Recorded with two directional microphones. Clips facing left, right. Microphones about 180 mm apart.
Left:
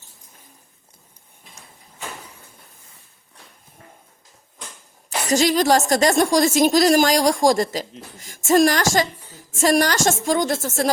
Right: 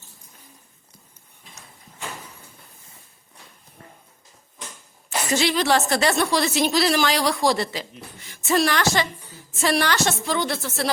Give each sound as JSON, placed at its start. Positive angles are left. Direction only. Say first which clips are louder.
{"t": 5.0, "sound": "a woman's voice", "louder": "left 4 dB", "side_deg": 40}